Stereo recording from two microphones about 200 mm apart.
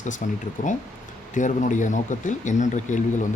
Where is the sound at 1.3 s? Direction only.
40° left (ahead or behind).